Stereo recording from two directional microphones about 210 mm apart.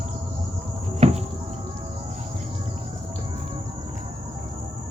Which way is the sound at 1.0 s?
30° right (ahead or behind).